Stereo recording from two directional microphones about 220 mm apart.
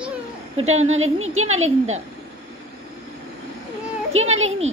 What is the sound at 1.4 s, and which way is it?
Speech, 65° right (ahead or behind).